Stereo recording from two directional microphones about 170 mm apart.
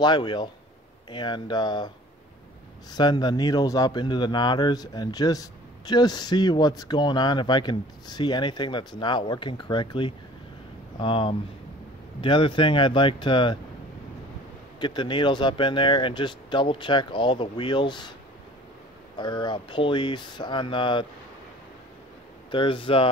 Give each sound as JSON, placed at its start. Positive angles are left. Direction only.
{"t": 0.0, "sound": "speech", "side_deg": 25}
{"t": 2.9, "sound": "speech", "side_deg": 25}
{"t": 14.8, "sound": "speech", "side_deg": 25}
{"t": 19.1, "sound": "speech", "side_deg": 25}
{"t": 22.5, "sound": "speech", "side_deg": 30}